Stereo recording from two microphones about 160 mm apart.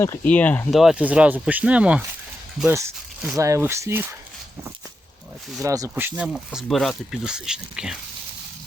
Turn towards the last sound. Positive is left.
turn(degrees=-5)  # may be behind; listen again after turning